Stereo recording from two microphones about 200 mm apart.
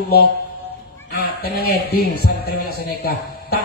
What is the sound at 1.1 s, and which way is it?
A man's voice, 50° left (ahead or behind).